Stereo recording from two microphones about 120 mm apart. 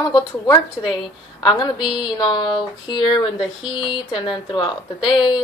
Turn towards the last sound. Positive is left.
turn(degrees=40)  # may be behind; listen again after turning